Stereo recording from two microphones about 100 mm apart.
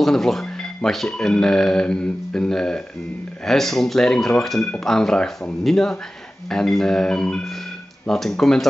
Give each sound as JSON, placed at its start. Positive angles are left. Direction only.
{"t": 0.0, "sound": "speech", "side_deg": 5}